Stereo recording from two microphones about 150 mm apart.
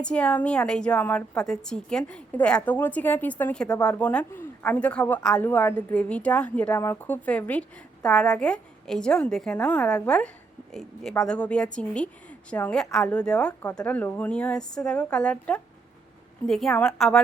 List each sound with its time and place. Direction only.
0.0 s a woman's voice: 10° left (ahead or behind)